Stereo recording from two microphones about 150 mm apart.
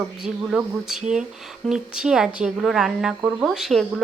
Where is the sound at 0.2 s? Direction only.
5° right (ahead or behind).